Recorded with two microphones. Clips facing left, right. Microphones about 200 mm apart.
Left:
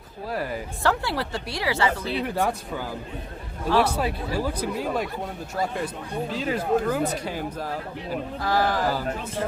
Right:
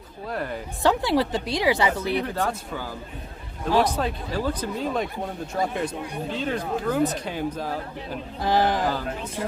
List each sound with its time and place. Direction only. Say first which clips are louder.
0.3 s speech: left 1 dB; 5° left (ahead or behind)
0.8 s a woman's voice: right 5 dB; 15° right (ahead or behind)
2.2 s speech: left 2 dB; 15° left (ahead or behind)
3.9 s speech: left 1 dB; 10° left (ahead or behind)
6.3 s speech: left 4 dB; 5° left (ahead or behind)
8.4 s speech: right 2 dB; 20° right (ahead or behind)